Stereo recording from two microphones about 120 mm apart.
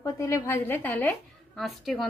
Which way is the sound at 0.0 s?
25° left (ahead or behind).